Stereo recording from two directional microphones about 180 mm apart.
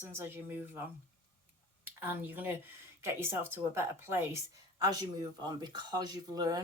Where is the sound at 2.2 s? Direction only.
10° right (ahead or behind).